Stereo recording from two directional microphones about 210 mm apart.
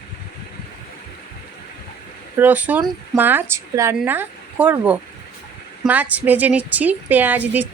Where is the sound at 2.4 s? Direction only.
10° right (ahead or behind).